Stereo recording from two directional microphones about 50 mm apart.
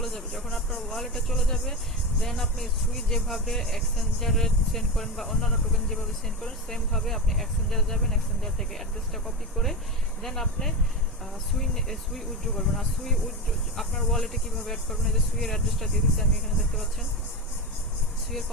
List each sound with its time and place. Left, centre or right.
0.0 s a sound: centre
0.4 s speech: centre
0.8 s speech: centre